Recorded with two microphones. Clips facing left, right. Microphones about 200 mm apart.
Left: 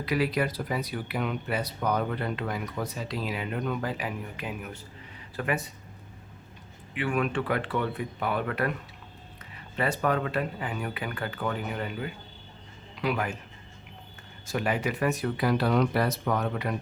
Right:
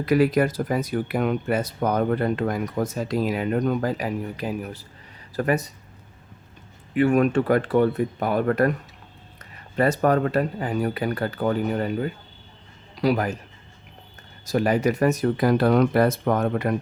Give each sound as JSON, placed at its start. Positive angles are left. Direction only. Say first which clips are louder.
{"t": 0.0, "sound": "speech", "louder": "right 8 dB", "side_deg": -45}
{"t": 6.9, "sound": "speech", "louder": "right 10 dB", "side_deg": -45}
{"t": 9.7, "sound": "speech", "louder": "right 7 dB", "side_deg": -40}
{"t": 14.4, "sound": "speech", "louder": "right 8 dB", "side_deg": -40}